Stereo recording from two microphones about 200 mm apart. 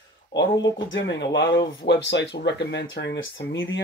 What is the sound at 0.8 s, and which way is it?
Speech, 65° left (ahead or behind).